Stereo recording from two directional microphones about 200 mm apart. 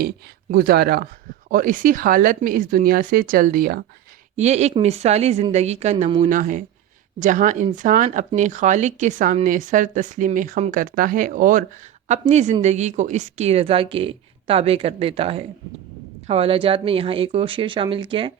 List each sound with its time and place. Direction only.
0.5 s speech: 50° right (ahead or behind)
4.4 s a woman's voice: 35° right (ahead or behind)